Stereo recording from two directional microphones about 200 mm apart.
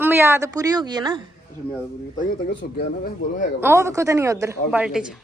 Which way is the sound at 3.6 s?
10° right (ahead or behind).